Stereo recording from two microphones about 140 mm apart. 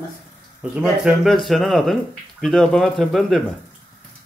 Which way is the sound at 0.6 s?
10° right (ahead or behind).